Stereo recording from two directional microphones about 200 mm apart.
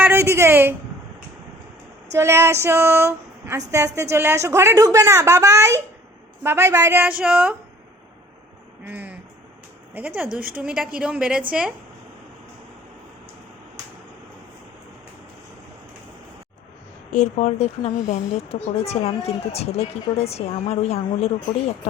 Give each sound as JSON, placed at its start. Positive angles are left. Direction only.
{"t": 0.0, "sound": "a woman's voice", "side_deg": -10}
{"t": 2.1, "sound": "speech", "side_deg": -15}
{"t": 8.9, "sound": "speech", "side_deg": -10}
{"t": 10.2, "sound": "a woman's voice", "side_deg": -5}
{"t": 17.1, "sound": "speech", "side_deg": 35}